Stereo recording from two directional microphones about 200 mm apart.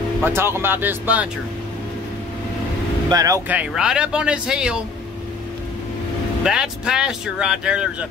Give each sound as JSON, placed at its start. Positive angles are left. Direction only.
{"t": 0.2, "sound": "speech", "side_deg": -10}
{"t": 3.1, "sound": "speech", "side_deg": -20}
{"t": 3.4, "sound": "speech", "side_deg": -5}
{"t": 6.4, "sound": "speech", "side_deg": -5}